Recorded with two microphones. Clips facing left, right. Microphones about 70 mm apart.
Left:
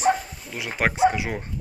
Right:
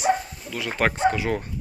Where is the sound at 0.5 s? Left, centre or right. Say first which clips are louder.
Left 1 dB; centre.